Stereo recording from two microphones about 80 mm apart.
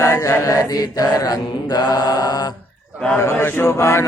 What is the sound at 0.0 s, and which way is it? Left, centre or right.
Chant, left.